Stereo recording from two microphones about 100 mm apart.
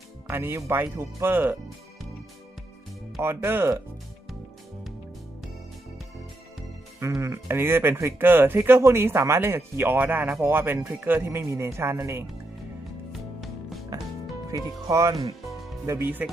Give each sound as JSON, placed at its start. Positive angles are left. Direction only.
{"t": 0.3, "sound": "speech", "side_deg": -25}
{"t": 3.2, "sound": "speech", "side_deg": -25}
{"t": 7.0, "sound": "speech", "side_deg": -30}
{"t": 13.1, "sound": "music", "side_deg": 0}
{"t": 14.5, "sound": "speech", "side_deg": -35}
{"t": 15.4, "sound": "music", "side_deg": 0}
{"t": 16.2, "sound": "speech", "side_deg": -15}